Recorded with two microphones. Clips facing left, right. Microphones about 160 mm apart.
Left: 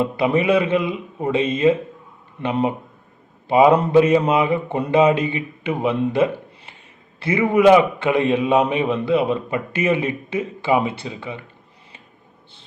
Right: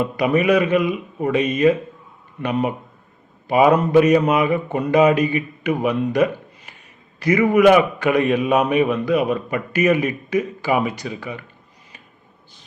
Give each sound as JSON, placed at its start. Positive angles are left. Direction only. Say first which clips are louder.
{"t": 0.0, "sound": "a man's voice", "louder": "even", "side_deg": 25}